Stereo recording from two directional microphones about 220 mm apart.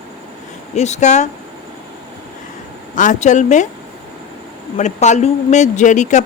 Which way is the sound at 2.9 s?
35° left (ahead or behind).